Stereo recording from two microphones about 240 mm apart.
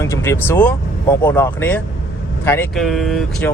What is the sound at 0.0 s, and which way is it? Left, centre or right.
Speech, centre.